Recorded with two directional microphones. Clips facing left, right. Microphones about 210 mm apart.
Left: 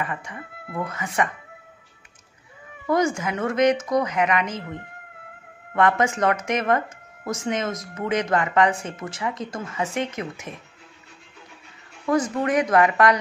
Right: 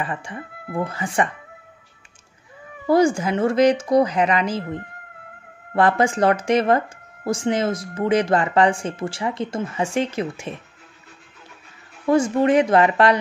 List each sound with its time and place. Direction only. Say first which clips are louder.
0.0 s speech: right 2 dB; 30° right (ahead or behind)
2.9 s speech: right 5 dB; 30° right (ahead or behind)
12.1 s speech: right 5 dB; 30° right (ahead or behind)